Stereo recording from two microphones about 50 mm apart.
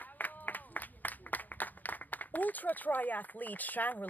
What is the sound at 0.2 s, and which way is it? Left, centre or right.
Applause, left.